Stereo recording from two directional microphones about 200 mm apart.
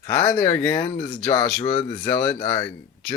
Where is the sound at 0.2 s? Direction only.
15° left (ahead or behind).